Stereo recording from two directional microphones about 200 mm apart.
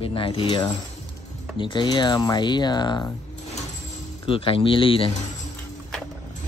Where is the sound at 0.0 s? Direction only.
25° left (ahead or behind).